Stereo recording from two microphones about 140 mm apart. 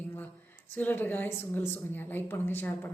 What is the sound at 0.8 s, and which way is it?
A woman's voice, 15° left (ahead or behind).